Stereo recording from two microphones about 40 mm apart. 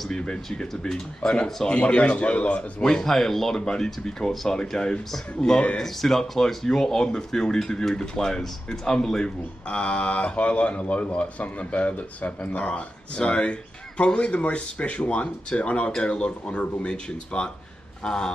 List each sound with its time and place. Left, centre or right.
0.1 s speech: left
1.7 s speech: left
2.8 s speech: centre
5.8 s speech: centre